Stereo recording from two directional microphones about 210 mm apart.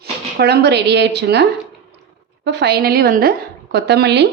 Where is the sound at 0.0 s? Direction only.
50° right (ahead or behind).